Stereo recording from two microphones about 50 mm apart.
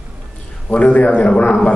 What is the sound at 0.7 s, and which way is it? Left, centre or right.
Speech, left.